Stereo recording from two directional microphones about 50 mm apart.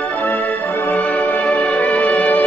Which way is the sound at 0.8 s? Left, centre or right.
Left.